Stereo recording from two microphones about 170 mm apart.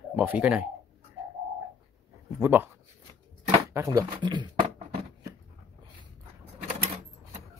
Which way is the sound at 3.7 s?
15° right (ahead or behind).